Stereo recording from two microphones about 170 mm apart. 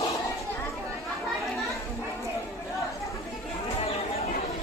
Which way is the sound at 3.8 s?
35° left (ahead or behind).